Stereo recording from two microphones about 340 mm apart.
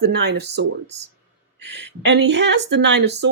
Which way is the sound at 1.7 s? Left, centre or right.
Right.